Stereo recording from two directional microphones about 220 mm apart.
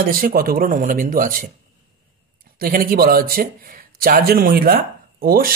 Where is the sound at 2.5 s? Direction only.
40° right (ahead or behind).